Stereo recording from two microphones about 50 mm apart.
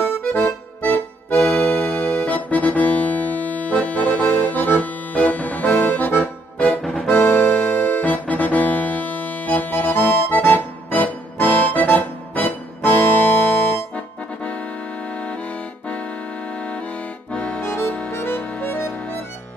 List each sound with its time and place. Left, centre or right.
0.0 s music: left
6.8 s music: centre
7.1 s music: left
15.0 s accordion: left
17.6 s accordion: left
18.1 s harmonica: left
18.4 s harmonica: left
18.7 s harmonica: left